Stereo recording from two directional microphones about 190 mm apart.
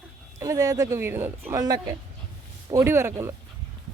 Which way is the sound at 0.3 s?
15° right (ahead or behind).